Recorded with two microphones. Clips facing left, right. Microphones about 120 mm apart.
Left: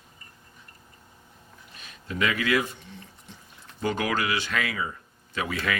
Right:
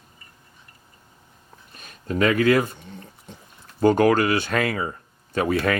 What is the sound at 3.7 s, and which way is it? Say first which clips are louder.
Speech: right 10 dB; 50° right (ahead or behind).